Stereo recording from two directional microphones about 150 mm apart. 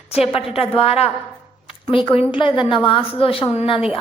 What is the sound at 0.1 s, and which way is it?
A woman's voice, 40° left (ahead or behind).